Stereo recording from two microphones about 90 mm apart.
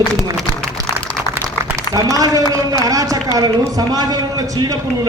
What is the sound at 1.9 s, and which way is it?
A man's voice, 40° right (ahead or behind).